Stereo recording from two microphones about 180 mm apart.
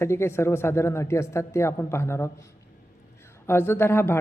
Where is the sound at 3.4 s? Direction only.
15° left (ahead or behind).